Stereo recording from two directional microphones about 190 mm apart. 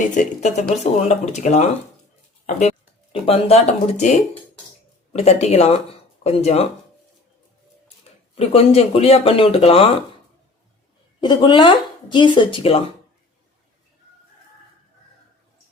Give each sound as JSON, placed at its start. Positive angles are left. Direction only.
{"t": 0.0, "sound": "speech", "side_deg": 40}
{"t": 8.4, "sound": "speech", "side_deg": 30}
{"t": 11.2, "sound": "speech", "side_deg": 25}